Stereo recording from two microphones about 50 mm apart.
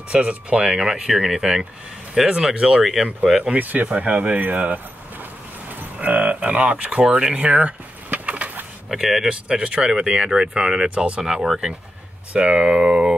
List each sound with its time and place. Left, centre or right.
0.1 s speech: right
0.7 s speech: centre
2.8 s speech: centre
3.5 s speech: right
8.9 s speech: centre
9.3 s speech: centre